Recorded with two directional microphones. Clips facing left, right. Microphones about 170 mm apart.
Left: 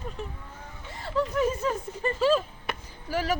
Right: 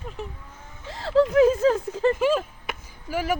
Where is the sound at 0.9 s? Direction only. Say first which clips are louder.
Right 9 dB; 90° right.